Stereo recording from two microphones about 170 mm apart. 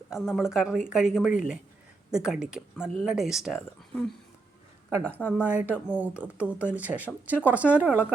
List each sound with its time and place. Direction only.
0.1 s a woman's voice: centre (ahead or behind)
4.9 s speech: 10° right (ahead or behind)